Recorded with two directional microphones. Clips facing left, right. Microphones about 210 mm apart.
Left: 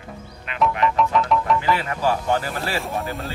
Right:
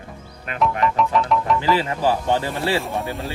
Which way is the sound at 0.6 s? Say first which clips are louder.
Even; centre (ahead or behind).